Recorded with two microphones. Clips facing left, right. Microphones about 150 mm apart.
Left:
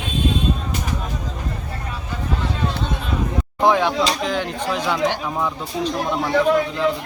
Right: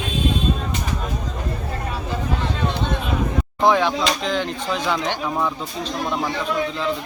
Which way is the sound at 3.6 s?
10° left (ahead or behind).